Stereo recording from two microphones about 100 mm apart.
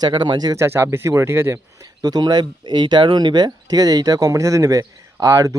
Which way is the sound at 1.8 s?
40° right (ahead or behind).